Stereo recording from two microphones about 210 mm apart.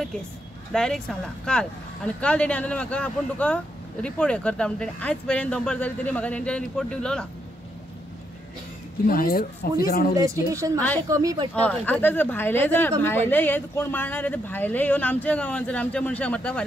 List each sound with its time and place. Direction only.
0.7 s speech: centre (ahead or behind)
9.0 s speech: 45° left (ahead or behind)
10.1 s speech: 15° right (ahead or behind)
11.6 s speech: 5° left (ahead or behind)